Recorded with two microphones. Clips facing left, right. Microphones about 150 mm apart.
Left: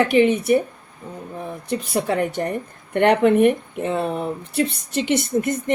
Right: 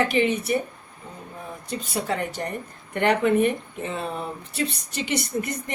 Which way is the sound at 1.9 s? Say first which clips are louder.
Left 5 dB; 55° left (ahead or behind).